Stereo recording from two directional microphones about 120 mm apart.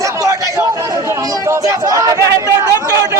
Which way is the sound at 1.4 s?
25° right (ahead or behind).